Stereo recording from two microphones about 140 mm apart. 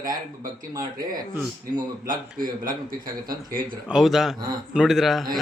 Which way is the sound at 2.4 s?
80° right.